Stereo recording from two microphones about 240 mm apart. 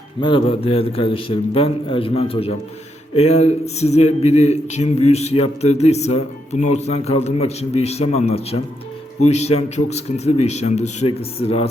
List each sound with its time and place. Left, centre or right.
0.2 s speech: left